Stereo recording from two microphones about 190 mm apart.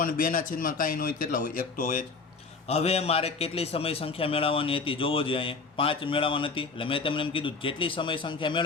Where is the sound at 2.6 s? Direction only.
35° left (ahead or behind).